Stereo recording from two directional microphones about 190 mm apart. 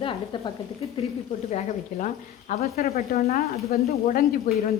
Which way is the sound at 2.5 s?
50° left (ahead or behind).